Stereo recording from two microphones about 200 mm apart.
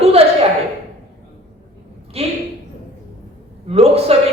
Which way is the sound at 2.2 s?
30° right (ahead or behind).